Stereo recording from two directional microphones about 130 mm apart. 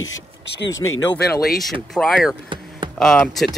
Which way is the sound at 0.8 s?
25° left (ahead or behind).